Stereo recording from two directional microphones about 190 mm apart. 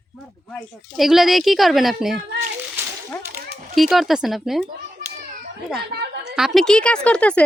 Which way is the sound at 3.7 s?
Centre (ahead or behind).